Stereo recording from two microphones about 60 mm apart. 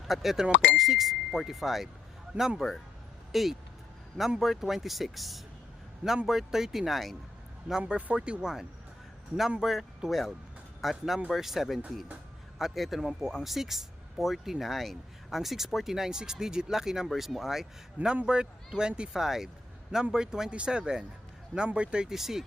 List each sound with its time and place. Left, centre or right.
0.1 s speech: centre
2.3 s a man's voice: right
3.3 s speech: centre
7.7 s speech: centre
18.1 s speech: centre
19.2 s speech: centre